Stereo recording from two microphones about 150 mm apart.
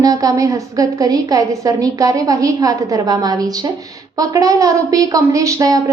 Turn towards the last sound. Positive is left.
turn(degrees=-20)  # may be behind; listen again after turning